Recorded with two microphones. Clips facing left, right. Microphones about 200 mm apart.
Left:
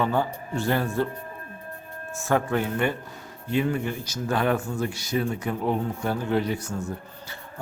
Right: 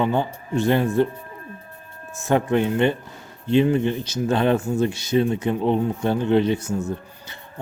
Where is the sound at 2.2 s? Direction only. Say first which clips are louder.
Right 5 dB; 20° right (ahead or behind).